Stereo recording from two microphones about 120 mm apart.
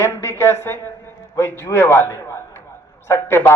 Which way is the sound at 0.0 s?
25° left (ahead or behind).